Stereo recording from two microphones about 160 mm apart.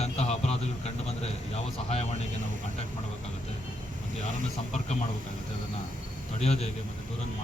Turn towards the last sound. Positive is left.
turn(degrees=40)  # may be behind; listen again after turning